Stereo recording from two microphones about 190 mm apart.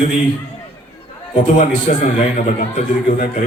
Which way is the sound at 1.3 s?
40° left (ahead or behind).